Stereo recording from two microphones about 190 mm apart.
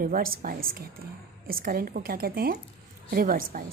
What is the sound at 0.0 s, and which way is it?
A woman's voice, 50° right (ahead or behind).